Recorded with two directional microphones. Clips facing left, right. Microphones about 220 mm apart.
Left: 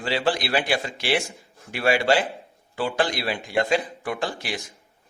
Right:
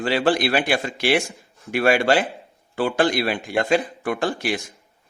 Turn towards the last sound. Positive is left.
turn(degrees=-50)  # may be behind; listen again after turning